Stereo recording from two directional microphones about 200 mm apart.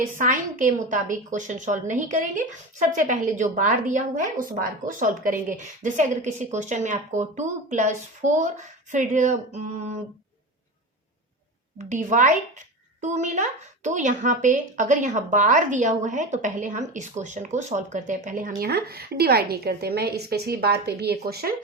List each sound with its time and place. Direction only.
0.0 s a woman's voice: 40° right (ahead or behind)
11.8 s a woman's voice: 35° right (ahead or behind)